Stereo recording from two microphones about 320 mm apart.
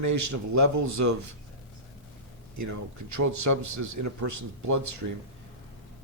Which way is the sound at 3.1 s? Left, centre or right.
Right.